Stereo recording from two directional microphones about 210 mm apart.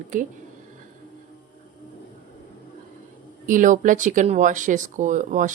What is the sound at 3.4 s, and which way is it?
Speech, 40° right (ahead or behind).